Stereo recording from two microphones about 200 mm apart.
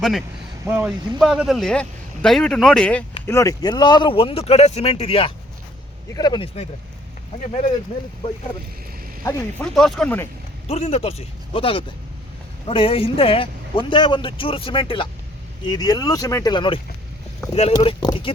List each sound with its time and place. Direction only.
0.0 s a man's voice: centre (ahead or behind); by 6.5 s 20° left (ahead or behind)
7.4 s a man's voice: 35° left (ahead or behind)
9.7 s a man's voice: centre (ahead or behind)
10.7 s a man's voice: 30° left (ahead or behind)